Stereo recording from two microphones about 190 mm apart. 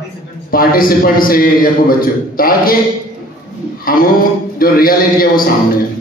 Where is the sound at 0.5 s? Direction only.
50° left (ahead or behind).